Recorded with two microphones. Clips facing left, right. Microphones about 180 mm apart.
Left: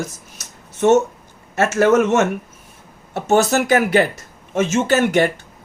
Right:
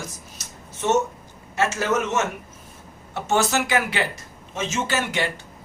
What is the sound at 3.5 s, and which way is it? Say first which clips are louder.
Speech: left 8 dB; 45° left (ahead or behind).